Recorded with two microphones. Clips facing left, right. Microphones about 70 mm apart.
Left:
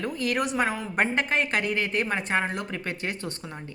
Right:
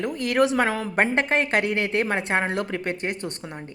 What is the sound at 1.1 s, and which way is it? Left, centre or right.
A woman's voice, right.